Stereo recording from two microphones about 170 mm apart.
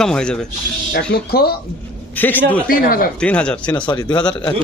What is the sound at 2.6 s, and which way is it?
Speech, 60° left (ahead or behind).